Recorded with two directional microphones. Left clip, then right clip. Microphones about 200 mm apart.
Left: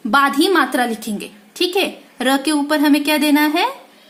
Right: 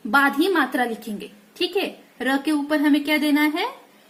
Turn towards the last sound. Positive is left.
turn(degrees=20)  # may be behind; listen again after turning